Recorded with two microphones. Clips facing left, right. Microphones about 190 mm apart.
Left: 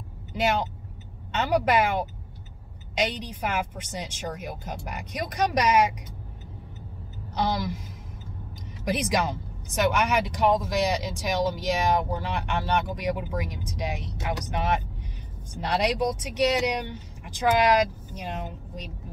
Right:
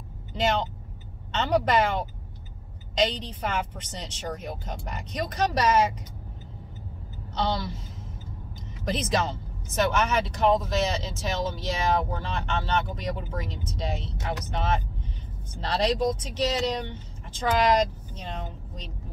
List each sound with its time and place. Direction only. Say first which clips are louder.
0.3 s speech: even; 10° left (ahead or behind)
8.8 s speech: left 1 dB; 10° left (ahead or behind)